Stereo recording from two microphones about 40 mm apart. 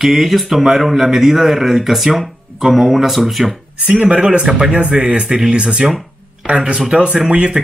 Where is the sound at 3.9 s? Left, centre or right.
Right.